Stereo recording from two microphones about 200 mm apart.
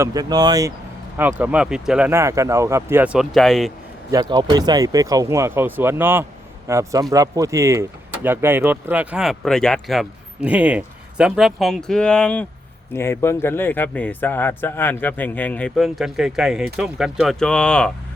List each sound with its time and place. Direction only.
0.0 s speech: 20° right (ahead or behind)
1.1 s speech: 10° right (ahead or behind)
4.1 s speech: 20° right (ahead or behind); by 17.9 s 5° left (ahead or behind)